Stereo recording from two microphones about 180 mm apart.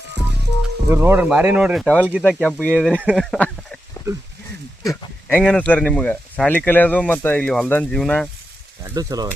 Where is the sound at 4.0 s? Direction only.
20° left (ahead or behind).